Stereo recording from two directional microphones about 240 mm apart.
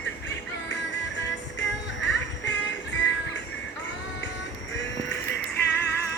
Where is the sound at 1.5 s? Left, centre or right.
Left.